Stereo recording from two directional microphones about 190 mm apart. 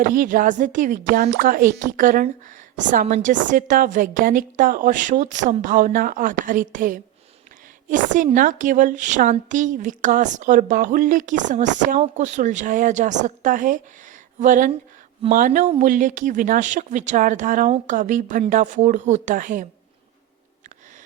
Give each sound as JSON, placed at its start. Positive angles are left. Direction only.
{"t": 0.0, "sound": "a woman's voice", "side_deg": -45}